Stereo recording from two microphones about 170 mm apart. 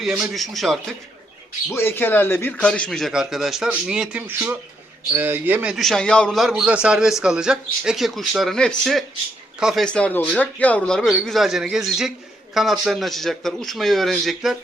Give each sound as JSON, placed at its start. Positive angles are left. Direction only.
{"t": 0.0, "sound": "a man's voice", "side_deg": 0}
{"t": 1.7, "sound": "a man's voice", "side_deg": 15}